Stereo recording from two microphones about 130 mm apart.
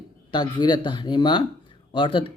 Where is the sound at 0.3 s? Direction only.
35° left (ahead or behind).